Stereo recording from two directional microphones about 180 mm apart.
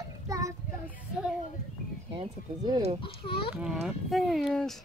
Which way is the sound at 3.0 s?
30° left (ahead or behind).